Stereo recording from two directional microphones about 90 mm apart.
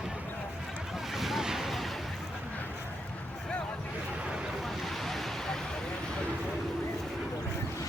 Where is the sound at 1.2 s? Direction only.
5° right (ahead or behind).